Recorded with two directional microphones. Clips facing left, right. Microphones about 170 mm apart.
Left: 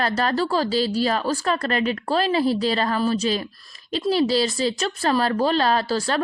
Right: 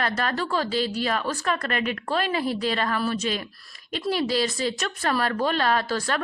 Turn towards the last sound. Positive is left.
turn(degrees=30)  # may be behind; listen again after turning